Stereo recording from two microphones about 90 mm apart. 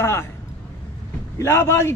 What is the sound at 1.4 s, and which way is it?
Speech, 30° left (ahead or behind).